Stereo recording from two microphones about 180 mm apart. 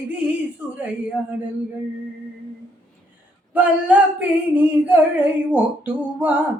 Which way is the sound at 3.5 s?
5° right (ahead or behind).